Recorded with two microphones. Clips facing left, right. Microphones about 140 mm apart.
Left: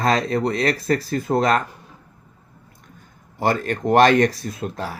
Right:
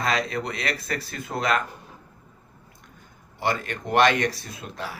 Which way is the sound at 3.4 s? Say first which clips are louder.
Left 6 dB; 40° left (ahead or behind).